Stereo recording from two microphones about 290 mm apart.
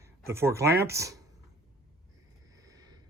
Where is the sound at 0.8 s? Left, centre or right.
Centre.